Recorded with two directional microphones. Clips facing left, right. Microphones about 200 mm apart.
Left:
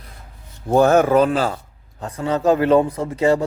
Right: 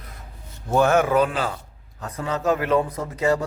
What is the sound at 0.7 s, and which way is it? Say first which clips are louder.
Speech: left 5 dB; 35° left (ahead or behind).